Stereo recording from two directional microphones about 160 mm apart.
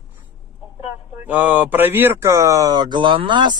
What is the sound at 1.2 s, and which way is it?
Speech, 10° right (ahead or behind).